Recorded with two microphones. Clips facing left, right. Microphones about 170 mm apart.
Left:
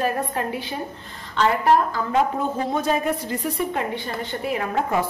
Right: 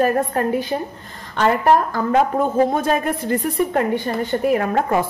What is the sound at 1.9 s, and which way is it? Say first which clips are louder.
Speech: right 4 dB; 50° right (ahead or behind).